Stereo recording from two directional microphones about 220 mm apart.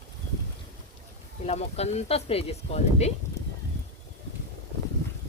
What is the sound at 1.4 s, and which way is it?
Speech, 30° left (ahead or behind).